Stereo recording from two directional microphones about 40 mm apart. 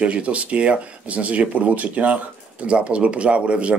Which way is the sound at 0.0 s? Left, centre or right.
Right.